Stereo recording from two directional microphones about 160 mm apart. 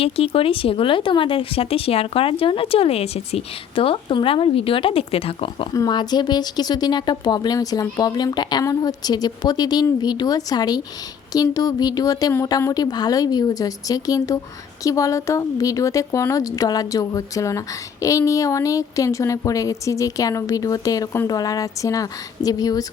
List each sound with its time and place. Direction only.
0.0 s speech: 35° left (ahead or behind)